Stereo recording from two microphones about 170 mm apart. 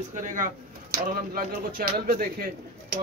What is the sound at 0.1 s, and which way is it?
Speech, 50° right (ahead or behind).